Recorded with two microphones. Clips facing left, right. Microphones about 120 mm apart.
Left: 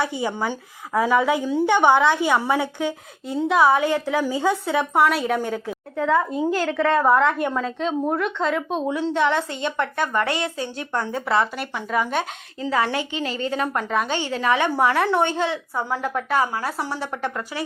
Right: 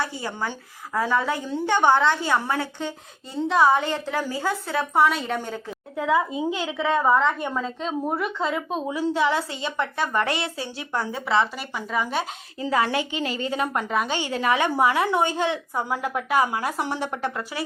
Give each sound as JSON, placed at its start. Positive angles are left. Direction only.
{"t": 0.0, "sound": "a woman's voice", "side_deg": 15}
{"t": 4.9, "sound": "a woman's voice", "side_deg": 5}
{"t": 6.0, "sound": "a woman's voice", "side_deg": -10}
{"t": 12.5, "sound": "a woman's voice", "side_deg": -20}
{"t": 13.0, "sound": "a woman's voice", "side_deg": 40}
{"t": 13.5, "sound": "a woman's voice", "side_deg": -10}